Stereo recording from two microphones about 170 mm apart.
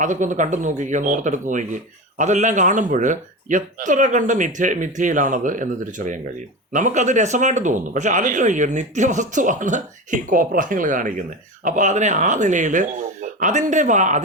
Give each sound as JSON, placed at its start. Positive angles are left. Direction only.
{"t": 0.0, "sound": "speech", "side_deg": -45}